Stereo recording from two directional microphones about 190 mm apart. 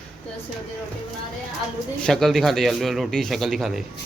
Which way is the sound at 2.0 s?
Centre (ahead or behind).